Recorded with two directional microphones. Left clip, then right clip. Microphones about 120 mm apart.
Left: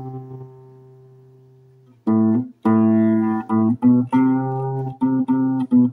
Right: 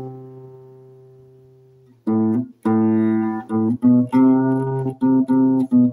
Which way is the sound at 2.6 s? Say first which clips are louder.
Left 1 dB; 30° left (ahead or behind).